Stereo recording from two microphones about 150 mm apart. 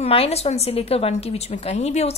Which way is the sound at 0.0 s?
40° left (ahead or behind).